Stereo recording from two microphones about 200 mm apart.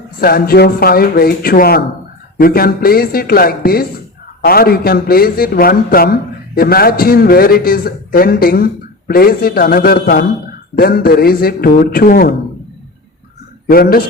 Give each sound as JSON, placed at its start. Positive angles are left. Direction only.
{"t": 0.2, "sound": "a man's voice", "side_deg": 50}
{"t": 13.7, "sound": "a man's voice", "side_deg": 45}